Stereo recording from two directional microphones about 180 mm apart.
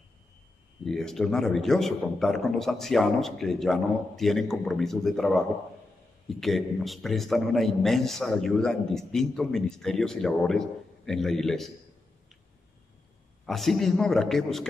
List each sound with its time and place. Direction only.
0.8 s a man's voice: centre (ahead or behind)
13.5 s a man's voice: centre (ahead or behind)